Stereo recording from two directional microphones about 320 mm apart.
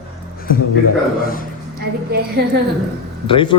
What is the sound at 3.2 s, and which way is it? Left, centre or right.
Speech, centre.